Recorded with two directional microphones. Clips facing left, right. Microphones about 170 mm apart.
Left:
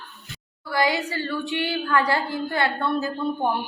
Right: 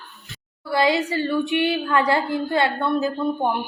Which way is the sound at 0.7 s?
25° right (ahead or behind).